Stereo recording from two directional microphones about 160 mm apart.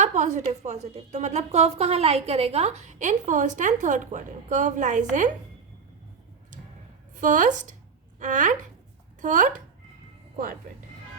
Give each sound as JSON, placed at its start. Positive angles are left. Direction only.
{"t": 0.0, "sound": "a woman's voice", "side_deg": -45}
{"t": 7.2, "sound": "a woman's voice", "side_deg": -55}